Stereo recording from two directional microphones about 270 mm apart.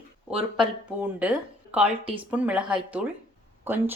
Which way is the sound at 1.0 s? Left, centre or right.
Centre.